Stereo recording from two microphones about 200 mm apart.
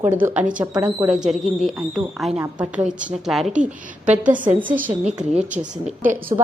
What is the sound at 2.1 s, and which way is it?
A woman's voice, centre (ahead or behind).